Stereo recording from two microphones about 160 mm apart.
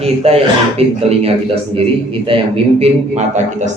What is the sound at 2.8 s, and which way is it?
Speech, 45° right (ahead or behind).